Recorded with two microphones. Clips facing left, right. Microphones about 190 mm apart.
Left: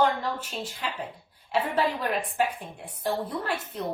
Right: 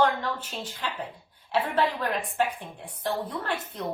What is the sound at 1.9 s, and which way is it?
Speech, 10° left (ahead or behind).